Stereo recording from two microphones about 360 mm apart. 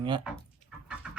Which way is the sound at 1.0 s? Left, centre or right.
Centre.